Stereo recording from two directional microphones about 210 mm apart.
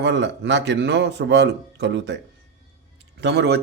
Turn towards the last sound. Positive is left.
turn(degrees=-55)  # may be behind; listen again after turning